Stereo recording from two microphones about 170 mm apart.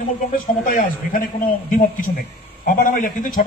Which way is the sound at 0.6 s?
50° left (ahead or behind).